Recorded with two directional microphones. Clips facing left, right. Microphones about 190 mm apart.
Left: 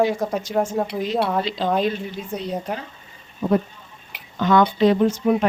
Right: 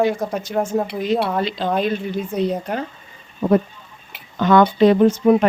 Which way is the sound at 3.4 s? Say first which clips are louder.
Right 3 dB; 60° right (ahead or behind).